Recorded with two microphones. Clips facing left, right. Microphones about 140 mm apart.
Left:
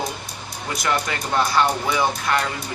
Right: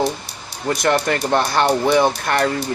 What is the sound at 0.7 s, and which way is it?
Speech, 55° right (ahead or behind).